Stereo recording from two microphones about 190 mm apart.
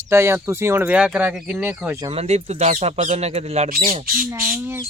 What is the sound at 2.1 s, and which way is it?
Speech, 35° right (ahead or behind).